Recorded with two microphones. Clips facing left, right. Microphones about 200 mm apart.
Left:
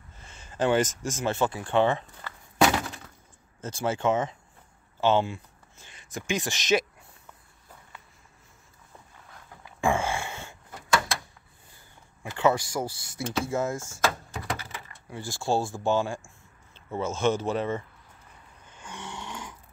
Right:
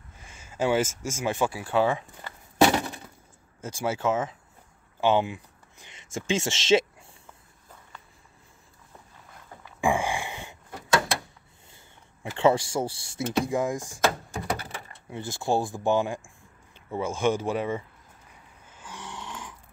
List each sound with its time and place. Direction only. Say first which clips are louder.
0.2 s speech: even; 10° right (ahead or behind)
2.6 s glass: right 2 dB; 30° right (ahead or behind)
3.6 s speech: left 1 dB; 10° right (ahead or behind)
5.0 s speech: even; 15° right (ahead or behind)
9.8 s a sound: right 1 dB; 15° right (ahead or behind)
12.4 s speech: right 2 dB; 30° right (ahead or behind)
13.4 s speech: right 2 dB; 15° right (ahead or behind)
15.0 s speech: right 1 dB; 20° right (ahead or behind)
18.7 s snoring: left 1 dB; 5° right (ahead or behind)